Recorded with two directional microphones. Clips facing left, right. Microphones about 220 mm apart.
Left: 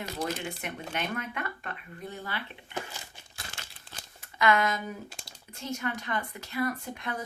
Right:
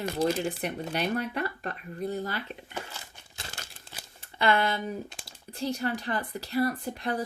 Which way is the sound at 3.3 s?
40° right (ahead or behind).